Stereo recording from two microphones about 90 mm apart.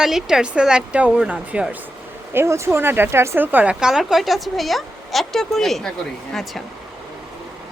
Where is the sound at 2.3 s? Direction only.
30° right (ahead or behind).